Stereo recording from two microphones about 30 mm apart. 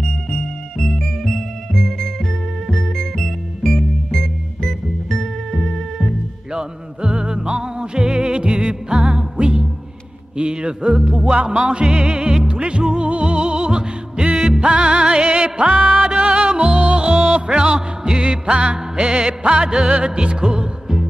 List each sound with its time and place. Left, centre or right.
0.0 s music: left
6.5 s music: right
10.3 s a sound: right
11.0 s music: right
14.3 s music: centre
14.6 s music: right
15.2 s music: right
16.0 s music: right
17.6 s music: right
18.2 s music: right